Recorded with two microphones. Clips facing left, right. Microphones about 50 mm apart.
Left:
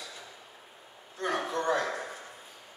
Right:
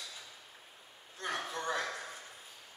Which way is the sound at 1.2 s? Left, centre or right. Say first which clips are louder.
Left 7 dB; centre.